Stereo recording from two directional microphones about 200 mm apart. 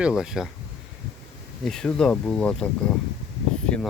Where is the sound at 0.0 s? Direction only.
5° right (ahead or behind).